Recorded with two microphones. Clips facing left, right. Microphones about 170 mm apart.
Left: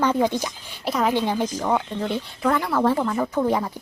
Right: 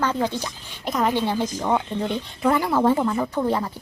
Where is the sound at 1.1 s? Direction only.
15° left (ahead or behind).